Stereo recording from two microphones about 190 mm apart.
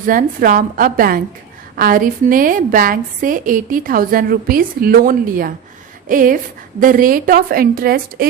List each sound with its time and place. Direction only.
0.0 s a woman's voice: 45° right (ahead or behind)